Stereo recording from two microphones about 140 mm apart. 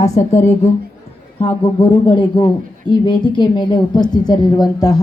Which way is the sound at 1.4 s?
40° left (ahead or behind).